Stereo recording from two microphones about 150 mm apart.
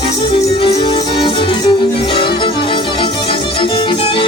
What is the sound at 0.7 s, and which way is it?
Music, 30° left (ahead or behind).